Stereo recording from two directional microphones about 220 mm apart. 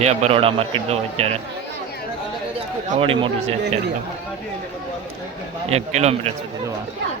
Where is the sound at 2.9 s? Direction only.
25° right (ahead or behind).